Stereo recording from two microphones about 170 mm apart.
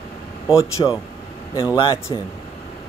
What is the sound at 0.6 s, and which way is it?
Speech, 20° left (ahead or behind).